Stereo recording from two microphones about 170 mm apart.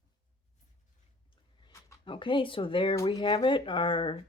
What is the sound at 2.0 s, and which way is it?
Speech, 30° left (ahead or behind).